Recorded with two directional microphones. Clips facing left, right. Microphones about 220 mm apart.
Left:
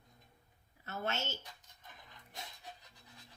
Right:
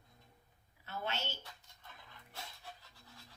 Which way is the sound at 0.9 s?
45° left (ahead or behind).